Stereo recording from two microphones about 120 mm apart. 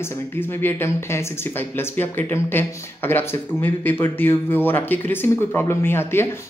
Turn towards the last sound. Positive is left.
turn(degrees=20)  # may be behind; listen again after turning